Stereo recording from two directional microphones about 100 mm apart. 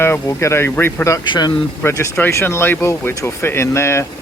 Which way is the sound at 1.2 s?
55° left (ahead or behind).